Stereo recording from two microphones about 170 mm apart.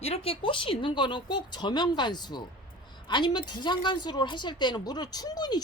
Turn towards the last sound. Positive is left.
turn(degrees=25)  # may be behind; listen again after turning